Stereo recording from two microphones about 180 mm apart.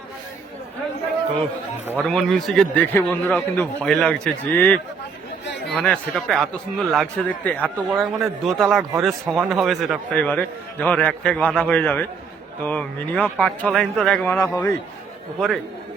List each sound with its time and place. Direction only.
2.0 s a man's voice: centre (ahead or behind)
14.3 s a man's voice: 15° left (ahead or behind)
15.4 s speech: centre (ahead or behind)